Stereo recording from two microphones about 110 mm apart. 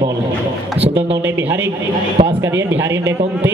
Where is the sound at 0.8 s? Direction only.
65° right (ahead or behind).